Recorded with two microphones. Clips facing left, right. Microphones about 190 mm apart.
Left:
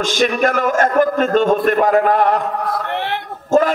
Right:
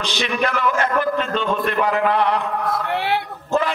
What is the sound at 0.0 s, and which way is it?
A man's voice, 45° left (ahead or behind).